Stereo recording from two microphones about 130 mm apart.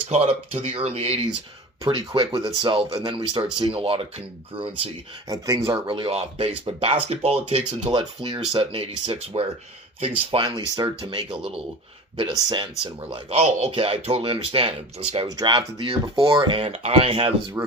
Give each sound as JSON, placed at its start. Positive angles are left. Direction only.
{"t": 0.1, "sound": "speech", "side_deg": -50}
{"t": 1.8, "sound": "speech", "side_deg": -40}
{"t": 5.3, "sound": "speech", "side_deg": -30}
{"t": 7.9, "sound": "speech", "side_deg": -35}
{"t": 8.7, "sound": "speech", "side_deg": -50}
{"t": 10.3, "sound": "speech", "side_deg": -30}